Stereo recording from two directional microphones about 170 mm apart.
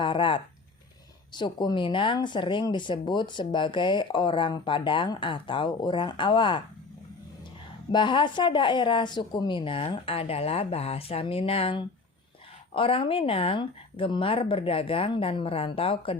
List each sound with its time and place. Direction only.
0.0 s speech: 30° left (ahead or behind)
7.9 s a woman's voice: 25° left (ahead or behind)